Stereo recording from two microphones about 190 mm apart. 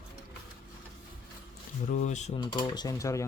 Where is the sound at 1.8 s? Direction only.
40° left (ahead or behind).